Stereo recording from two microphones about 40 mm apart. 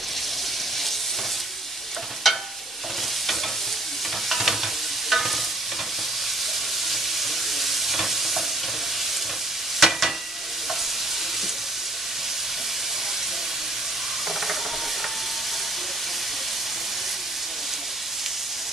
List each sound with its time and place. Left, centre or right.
2.3 s stir: centre
4.3 s stir: centre
6.9 s stir: centre
9.8 s stir: centre